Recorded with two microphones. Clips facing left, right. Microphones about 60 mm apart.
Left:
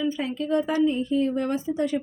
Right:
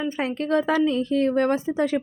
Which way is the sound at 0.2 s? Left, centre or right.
Right.